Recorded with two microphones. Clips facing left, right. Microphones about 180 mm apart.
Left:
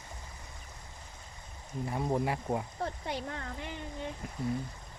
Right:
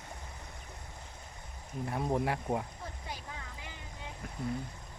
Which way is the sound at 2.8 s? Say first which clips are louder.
Left 8 dB; 70° left (ahead or behind).